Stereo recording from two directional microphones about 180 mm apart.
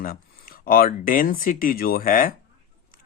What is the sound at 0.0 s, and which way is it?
Speech, 55° left (ahead or behind).